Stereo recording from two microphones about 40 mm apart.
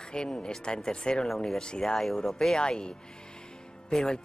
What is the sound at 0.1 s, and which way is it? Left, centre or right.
Speech, left.